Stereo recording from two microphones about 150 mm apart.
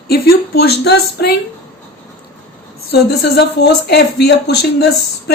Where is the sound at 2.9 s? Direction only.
90° left.